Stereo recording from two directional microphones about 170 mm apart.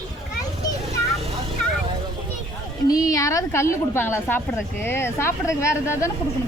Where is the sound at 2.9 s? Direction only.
20° left (ahead or behind).